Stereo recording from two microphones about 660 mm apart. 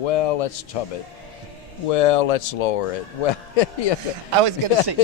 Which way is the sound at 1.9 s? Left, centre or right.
Left.